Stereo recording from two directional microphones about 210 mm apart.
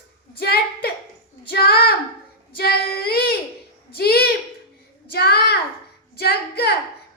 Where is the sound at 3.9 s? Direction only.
45° left (ahead or behind).